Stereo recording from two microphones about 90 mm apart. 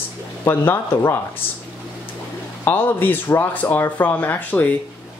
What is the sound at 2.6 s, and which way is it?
Speech, 20° left (ahead or behind).